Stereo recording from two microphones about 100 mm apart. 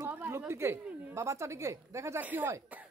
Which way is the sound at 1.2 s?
30° right (ahead or behind).